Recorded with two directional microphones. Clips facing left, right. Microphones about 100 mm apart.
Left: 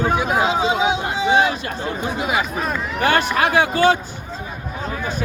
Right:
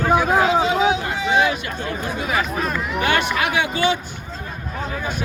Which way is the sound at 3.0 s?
35° left (ahead or behind).